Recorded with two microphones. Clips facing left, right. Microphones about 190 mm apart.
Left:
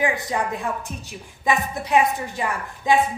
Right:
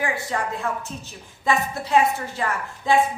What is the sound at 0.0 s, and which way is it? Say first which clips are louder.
A woman's voice: left 3 dB; 15° left (ahead or behind).